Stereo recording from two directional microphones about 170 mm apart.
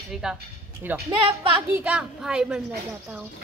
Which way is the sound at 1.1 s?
30° right (ahead or behind).